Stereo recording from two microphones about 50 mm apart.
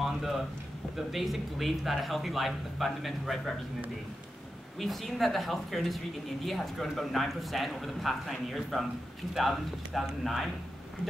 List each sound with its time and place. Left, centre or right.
0.0 s a sound: centre
0.9 s speech: centre
4.7 s speech: centre